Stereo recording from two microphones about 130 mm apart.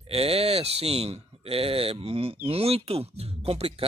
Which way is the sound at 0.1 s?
50° right (ahead or behind).